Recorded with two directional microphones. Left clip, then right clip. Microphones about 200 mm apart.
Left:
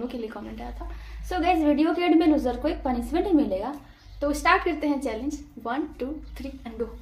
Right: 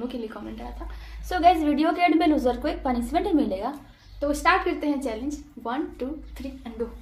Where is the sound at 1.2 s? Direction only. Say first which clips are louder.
Right 4 dB; 10° right (ahead or behind).